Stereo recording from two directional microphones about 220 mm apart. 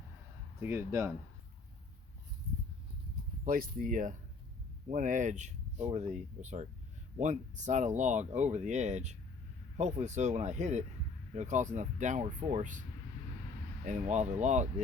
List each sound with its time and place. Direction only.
0.6 s speech: 10° right (ahead or behind)
3.4 s speech: 40° right (ahead or behind)
13.8 s speech: 35° right (ahead or behind)